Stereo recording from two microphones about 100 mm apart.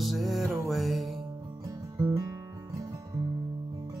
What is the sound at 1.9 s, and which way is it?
Guitar, 40° right (ahead or behind).